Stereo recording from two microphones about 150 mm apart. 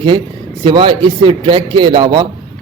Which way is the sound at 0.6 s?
35° right (ahead or behind).